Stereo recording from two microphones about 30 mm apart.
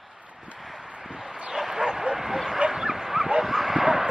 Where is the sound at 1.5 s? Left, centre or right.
Centre.